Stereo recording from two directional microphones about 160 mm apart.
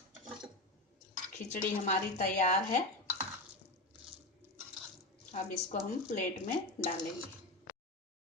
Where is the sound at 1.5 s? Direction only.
50° left (ahead or behind).